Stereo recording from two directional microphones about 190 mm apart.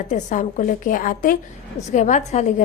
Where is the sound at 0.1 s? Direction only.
40° left (ahead or behind).